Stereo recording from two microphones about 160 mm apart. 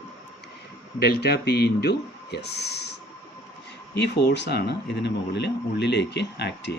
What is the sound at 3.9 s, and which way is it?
Speech, 90° left.